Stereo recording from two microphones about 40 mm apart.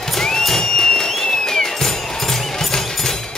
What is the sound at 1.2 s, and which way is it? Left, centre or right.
Music, centre.